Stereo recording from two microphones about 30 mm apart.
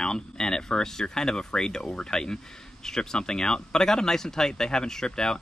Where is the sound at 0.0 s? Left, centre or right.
Left.